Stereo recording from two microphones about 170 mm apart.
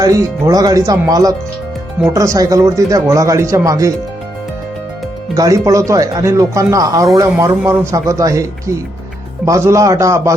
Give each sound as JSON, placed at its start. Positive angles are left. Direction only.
{"t": 0.0, "sound": "speech", "side_deg": -20}
{"t": 5.3, "sound": "a man's voice", "side_deg": -20}